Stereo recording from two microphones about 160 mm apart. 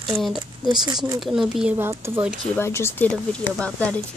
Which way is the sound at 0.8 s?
25° right (ahead or behind).